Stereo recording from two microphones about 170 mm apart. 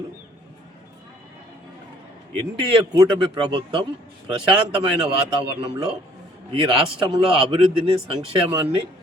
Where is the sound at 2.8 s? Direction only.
20° right (ahead or behind).